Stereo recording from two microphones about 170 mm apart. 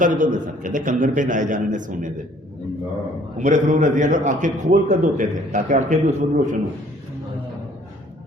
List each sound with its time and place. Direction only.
0.0 s a man's voice: 50° right (ahead or behind)
3.3 s a man's voice: 45° right (ahead or behind)